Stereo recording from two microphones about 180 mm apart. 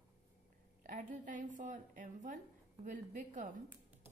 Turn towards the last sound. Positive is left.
turn(degrees=-45)  # may be behind; listen again after turning